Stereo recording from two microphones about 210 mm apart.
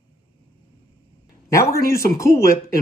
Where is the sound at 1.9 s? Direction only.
15° left (ahead or behind).